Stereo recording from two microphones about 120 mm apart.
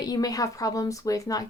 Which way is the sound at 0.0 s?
30° left (ahead or behind).